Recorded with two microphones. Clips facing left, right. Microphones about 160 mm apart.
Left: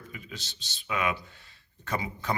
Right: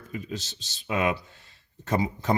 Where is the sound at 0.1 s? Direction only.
40° right (ahead or behind).